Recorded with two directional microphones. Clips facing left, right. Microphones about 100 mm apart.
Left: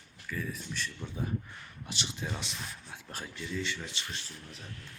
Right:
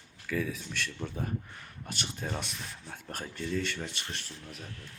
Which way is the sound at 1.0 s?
50° right (ahead or behind).